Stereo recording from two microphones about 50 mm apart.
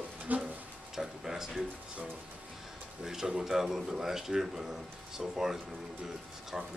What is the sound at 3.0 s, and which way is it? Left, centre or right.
Speech, centre.